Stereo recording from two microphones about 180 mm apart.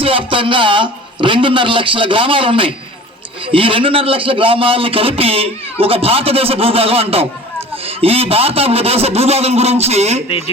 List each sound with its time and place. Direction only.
0.0 s a man's voice: 30° right (ahead or behind)
10.2 s speech: 30° left (ahead or behind)